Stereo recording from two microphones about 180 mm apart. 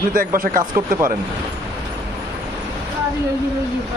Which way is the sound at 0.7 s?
15° right (ahead or behind).